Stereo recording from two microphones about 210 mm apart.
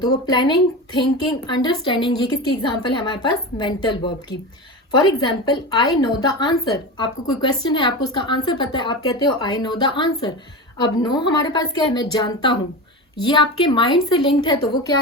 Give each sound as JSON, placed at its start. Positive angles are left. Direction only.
{"t": 0.0, "sound": "a woman's voice", "side_deg": 20}